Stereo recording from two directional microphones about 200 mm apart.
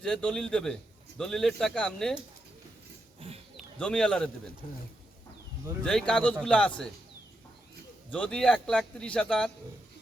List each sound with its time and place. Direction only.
0.0 s a man's voice: 5° left (ahead or behind)
3.2 s a sound: 30° right (ahead or behind)
3.6 s speech: 5° left (ahead or behind)
5.8 s a man's voice: 5° left (ahead or behind)
8.1 s a man's voice: 5° left (ahead or behind)